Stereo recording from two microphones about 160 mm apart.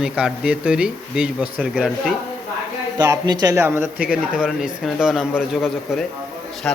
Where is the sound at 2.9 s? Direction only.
20° right (ahead or behind).